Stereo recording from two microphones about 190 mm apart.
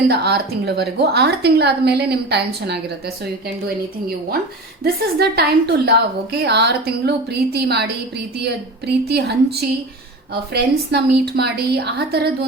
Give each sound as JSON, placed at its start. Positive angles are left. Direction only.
{"t": 0.1, "sound": "a woman's voice", "side_deg": -60}
{"t": 4.8, "sound": "a woman's voice", "side_deg": -55}